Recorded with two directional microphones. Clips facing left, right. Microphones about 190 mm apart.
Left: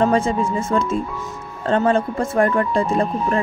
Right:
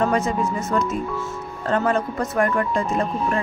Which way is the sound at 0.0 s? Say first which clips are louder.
Left 3 dB; 30° left (ahead or behind).